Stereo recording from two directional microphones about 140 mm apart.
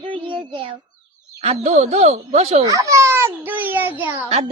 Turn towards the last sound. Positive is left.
turn(degrees=-15)  # may be behind; listen again after turning